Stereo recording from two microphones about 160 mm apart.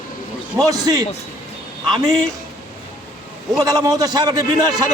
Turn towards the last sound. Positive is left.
turn(degrees=-25)  # may be behind; listen again after turning